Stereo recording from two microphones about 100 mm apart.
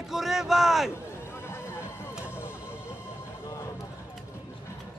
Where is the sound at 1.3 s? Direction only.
25° left (ahead or behind).